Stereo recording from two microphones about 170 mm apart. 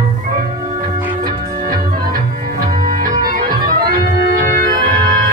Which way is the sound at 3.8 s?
60° right (ahead or behind).